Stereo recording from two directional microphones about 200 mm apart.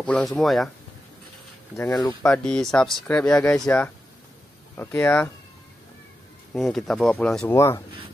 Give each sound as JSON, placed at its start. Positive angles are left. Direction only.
{"t": 0.0, "sound": "speech", "side_deg": 5}
{"t": 2.0, "sound": "speech", "side_deg": 10}
{"t": 6.5, "sound": "speech", "side_deg": 0}